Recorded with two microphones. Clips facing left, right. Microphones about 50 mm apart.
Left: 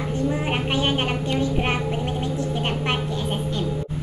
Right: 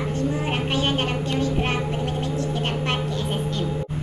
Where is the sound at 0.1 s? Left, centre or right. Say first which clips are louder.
Left 4 dB; centre.